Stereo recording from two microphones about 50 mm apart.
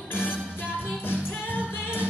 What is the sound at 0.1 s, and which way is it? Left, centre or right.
Music, left.